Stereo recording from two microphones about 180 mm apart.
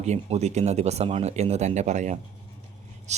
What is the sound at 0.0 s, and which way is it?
Speech, 35° right (ahead or behind).